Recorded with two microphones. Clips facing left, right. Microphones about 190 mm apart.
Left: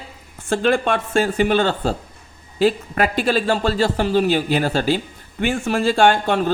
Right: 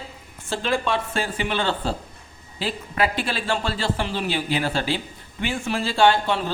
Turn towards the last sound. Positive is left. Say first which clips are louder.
# left 3 dB
turn(degrees=50)  # may be behind; listen again after turning